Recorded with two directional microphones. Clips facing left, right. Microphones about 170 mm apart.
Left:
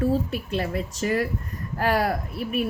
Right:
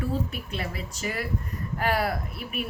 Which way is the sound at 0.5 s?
40° left (ahead or behind).